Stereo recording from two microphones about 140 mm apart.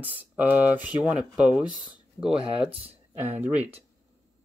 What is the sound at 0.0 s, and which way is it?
Speech, 10° right (ahead or behind).